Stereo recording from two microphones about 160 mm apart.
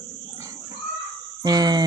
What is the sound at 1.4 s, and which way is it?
Speech, 25° right (ahead or behind).